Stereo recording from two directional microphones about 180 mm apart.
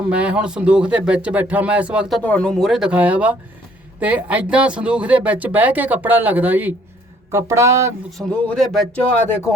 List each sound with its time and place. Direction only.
0.1 s speech: 5° right (ahead or behind)
8.3 s speech: 5° left (ahead or behind)